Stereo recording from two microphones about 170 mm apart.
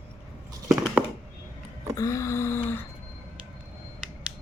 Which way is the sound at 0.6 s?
Centre (ahead or behind).